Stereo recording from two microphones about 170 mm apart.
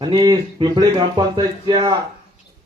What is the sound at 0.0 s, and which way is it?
Speech, 25° right (ahead or behind).